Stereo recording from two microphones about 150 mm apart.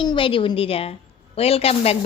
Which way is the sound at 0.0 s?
35° left (ahead or behind).